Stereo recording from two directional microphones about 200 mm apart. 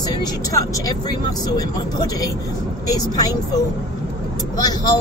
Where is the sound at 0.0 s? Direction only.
20° left (ahead or behind).